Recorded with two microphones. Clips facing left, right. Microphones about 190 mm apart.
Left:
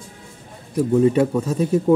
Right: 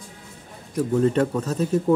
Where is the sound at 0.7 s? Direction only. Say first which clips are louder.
Left 4 dB; 10° left (ahead or behind).